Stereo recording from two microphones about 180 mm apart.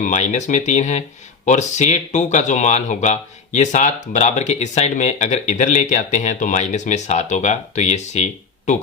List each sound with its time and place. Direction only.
0.0 s speech: 40° left (ahead or behind)